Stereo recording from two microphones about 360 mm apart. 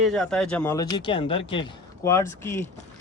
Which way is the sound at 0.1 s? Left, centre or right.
Centre.